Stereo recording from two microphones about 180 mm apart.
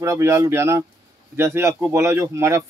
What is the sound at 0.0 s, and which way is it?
Speech, 15° right (ahead or behind).